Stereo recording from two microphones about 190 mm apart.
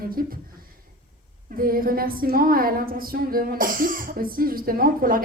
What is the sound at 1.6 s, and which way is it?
Speech, 50° right (ahead or behind).